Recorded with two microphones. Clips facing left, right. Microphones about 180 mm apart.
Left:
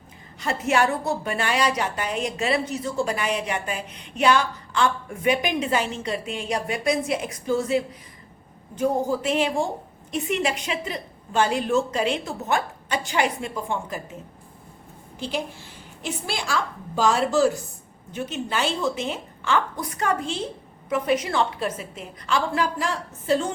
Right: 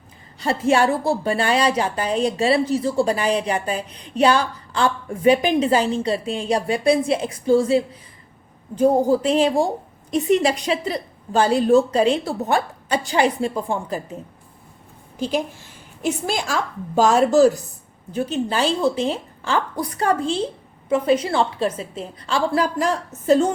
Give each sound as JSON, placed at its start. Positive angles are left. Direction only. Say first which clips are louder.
{"t": 0.3, "sound": "a woman's voice", "louder": "right 4 dB", "side_deg": -30}
{"t": 16.0, "sound": "a woman's voice", "louder": "right 6 dB", "side_deg": -45}